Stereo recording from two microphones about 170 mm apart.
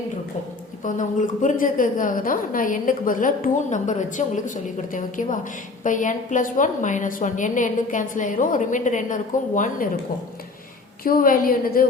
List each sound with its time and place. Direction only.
0.9 s a woman's voice: 50° left (ahead or behind)
11.0 s a woman's voice: 60° left (ahead or behind)